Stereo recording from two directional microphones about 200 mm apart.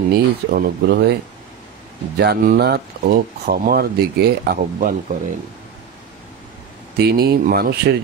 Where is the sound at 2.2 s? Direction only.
55° right (ahead or behind).